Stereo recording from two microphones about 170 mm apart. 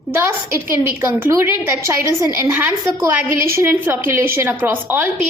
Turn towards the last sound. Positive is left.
turn(degrees=-10)  # may be behind; listen again after turning